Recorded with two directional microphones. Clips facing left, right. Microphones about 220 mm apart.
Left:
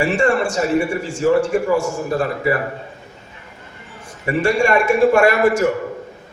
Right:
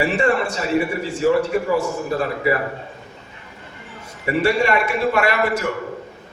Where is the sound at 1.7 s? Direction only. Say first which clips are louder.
Left 2 dB; 50° left (ahead or behind).